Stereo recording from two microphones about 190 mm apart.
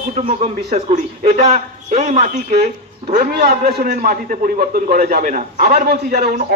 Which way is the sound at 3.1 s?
50° right (ahead or behind).